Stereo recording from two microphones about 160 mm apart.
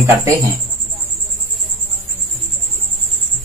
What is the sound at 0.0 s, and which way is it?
Speech, 20° right (ahead or behind).